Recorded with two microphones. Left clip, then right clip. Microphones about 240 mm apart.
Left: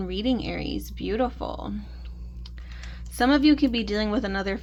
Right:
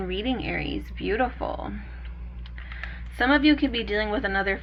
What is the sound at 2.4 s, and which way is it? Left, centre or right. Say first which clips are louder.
Speech: right 7 dB; left.